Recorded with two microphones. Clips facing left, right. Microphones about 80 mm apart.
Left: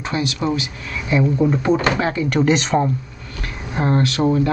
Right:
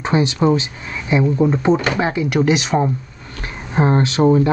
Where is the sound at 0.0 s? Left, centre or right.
Right; by 2.9 s centre.